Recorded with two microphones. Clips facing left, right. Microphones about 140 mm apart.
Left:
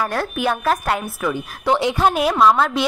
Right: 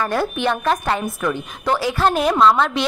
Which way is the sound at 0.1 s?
Centre (ahead or behind).